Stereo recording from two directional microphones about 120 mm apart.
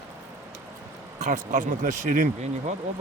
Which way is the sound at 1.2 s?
90° right.